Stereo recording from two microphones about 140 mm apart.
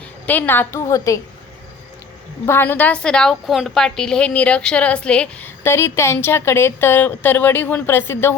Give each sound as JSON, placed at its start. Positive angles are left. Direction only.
{"t": 0.3, "sound": "a woman's voice", "side_deg": 15}
{"t": 2.5, "sound": "a woman's voice", "side_deg": 15}